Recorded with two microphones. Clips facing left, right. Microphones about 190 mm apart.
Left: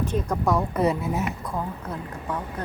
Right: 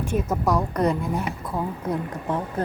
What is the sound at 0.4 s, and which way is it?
Speech, 5° left (ahead or behind).